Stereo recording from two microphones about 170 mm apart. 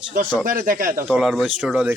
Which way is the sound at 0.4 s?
55° right (ahead or behind).